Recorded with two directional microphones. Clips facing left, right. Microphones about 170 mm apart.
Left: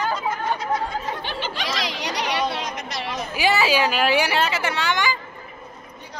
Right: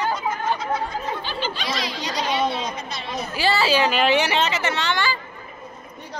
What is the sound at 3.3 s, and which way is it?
A woman's voice, 15° left (ahead or behind).